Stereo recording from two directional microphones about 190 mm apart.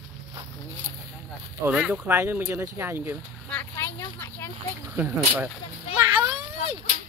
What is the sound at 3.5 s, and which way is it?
Vehicle, 15° left (ahead or behind).